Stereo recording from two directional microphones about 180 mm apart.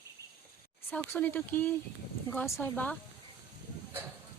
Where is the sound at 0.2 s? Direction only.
20° right (ahead or behind).